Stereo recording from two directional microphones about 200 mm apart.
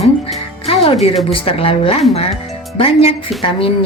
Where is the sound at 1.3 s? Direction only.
30° left (ahead or behind).